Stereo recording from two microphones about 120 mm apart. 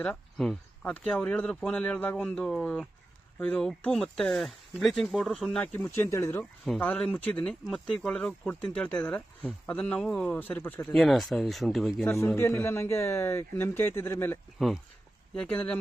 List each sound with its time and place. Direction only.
0.0 s speech: 5° left (ahead or behind)
5.7 s speech: 15° left (ahead or behind)
6.7 s speech: 10° left (ahead or behind)
10.9 s speech: centre (ahead or behind)
12.0 s speech: 25° left (ahead or behind)
15.4 s speech: 10° left (ahead or behind)